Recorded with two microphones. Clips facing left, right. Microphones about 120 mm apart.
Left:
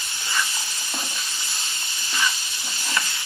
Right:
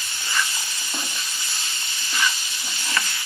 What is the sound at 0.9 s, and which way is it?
Stir, centre (ahead or behind).